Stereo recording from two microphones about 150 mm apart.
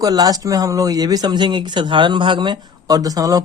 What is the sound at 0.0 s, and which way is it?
Speech, 25° right (ahead or behind).